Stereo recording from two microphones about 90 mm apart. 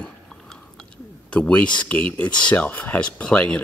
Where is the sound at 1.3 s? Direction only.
15° left (ahead or behind).